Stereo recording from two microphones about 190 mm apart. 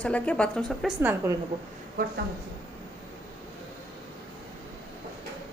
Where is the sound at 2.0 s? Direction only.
50° right (ahead or behind).